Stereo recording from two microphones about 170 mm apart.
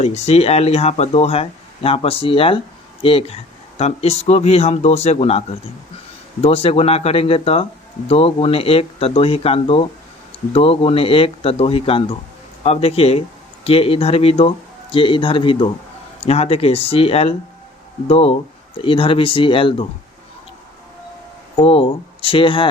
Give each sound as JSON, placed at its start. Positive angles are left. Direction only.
{"t": 0.0, "sound": "speech", "side_deg": 40}
{"t": 6.4, "sound": "speech", "side_deg": 35}
{"t": 21.5, "sound": "speech", "side_deg": 30}